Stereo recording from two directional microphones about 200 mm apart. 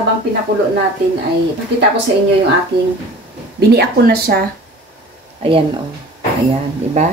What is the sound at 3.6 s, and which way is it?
Speech, 55° right (ahead or behind).